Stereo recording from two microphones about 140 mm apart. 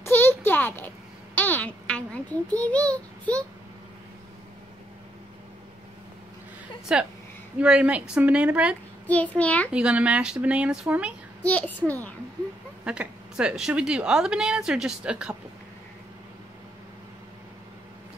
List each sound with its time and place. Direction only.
0.0 s a sound: 15° left (ahead or behind)
1.3 s a woman's voice: 15° left (ahead or behind)
6.9 s speech: 5° right (ahead or behind)
9.0 s a child's voice: 10° left (ahead or behind)
9.7 s speech: 10° right (ahead or behind)
11.4 s a child's voice: 10° left (ahead or behind)
12.8 s a woman's voice: 5° right (ahead or behind)